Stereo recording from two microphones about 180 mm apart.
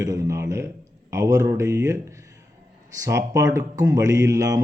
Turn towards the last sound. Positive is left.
turn(degrees=-20)  # may be behind; listen again after turning